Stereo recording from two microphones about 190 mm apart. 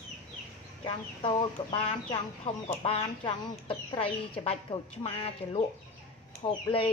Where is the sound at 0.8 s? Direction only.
25° left (ahead or behind).